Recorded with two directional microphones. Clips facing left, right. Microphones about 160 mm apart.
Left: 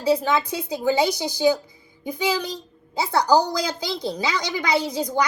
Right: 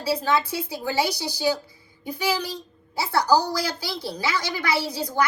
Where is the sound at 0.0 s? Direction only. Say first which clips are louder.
Left 3 dB; 15° left (ahead or behind).